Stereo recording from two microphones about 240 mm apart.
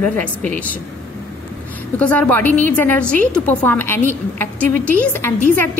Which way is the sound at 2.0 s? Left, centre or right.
Centre.